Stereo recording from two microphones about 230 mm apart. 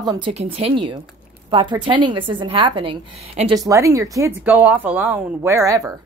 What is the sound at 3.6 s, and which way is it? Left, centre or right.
Speech, centre.